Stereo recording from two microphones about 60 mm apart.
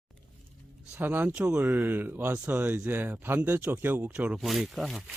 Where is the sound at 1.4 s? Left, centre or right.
Centre.